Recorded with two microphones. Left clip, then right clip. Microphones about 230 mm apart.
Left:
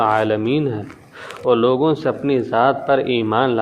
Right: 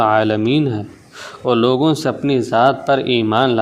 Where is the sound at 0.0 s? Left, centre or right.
Right.